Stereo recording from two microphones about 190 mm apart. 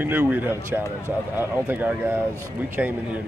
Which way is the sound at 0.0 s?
10° right (ahead or behind).